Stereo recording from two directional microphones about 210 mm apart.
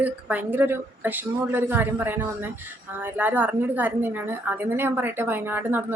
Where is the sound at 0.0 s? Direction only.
5° right (ahead or behind).